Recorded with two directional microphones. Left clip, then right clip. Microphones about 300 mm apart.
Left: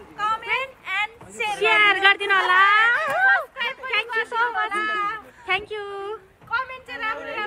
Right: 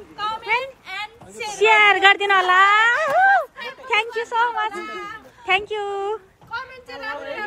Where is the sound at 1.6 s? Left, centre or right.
Centre.